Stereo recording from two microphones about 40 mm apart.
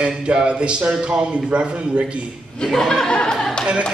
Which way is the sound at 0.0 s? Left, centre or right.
Right.